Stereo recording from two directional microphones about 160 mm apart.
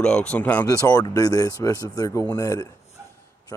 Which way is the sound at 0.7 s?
20° left (ahead or behind).